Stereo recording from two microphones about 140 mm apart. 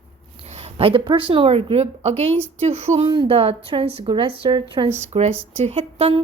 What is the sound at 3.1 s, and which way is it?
A woman's voice, 35° right (ahead or behind).